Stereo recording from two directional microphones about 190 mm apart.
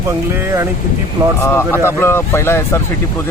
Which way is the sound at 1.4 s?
10° left (ahead or behind).